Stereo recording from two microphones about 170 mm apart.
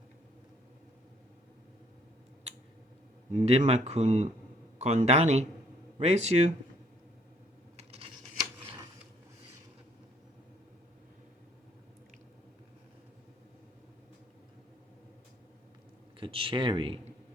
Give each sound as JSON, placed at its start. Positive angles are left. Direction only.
{"t": 3.3, "sound": "speech", "side_deg": -45}
{"t": 7.8, "sound": "a sound", "side_deg": -35}
{"t": 16.2, "sound": "speech", "side_deg": -30}